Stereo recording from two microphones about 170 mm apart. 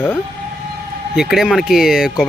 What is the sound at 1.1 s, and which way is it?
Speech, 5° right (ahead or behind).